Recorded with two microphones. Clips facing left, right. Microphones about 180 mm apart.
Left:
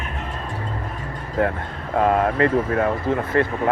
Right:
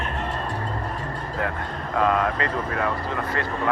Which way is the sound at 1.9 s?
30° left (ahead or behind).